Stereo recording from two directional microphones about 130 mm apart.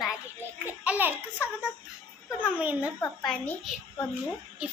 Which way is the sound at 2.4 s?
10° right (ahead or behind).